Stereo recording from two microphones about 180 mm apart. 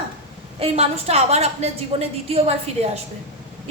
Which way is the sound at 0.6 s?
35° right (ahead or behind).